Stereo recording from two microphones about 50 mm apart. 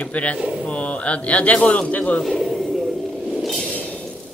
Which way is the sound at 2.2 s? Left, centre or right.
Centre.